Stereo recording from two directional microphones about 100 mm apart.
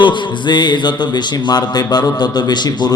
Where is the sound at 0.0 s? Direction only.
50° left (ahead or behind).